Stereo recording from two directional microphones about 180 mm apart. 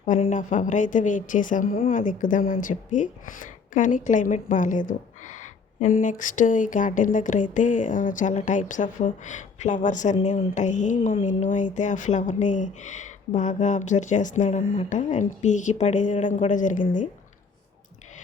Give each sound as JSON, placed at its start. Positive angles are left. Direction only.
{"t": 0.0, "sound": "speech", "side_deg": 40}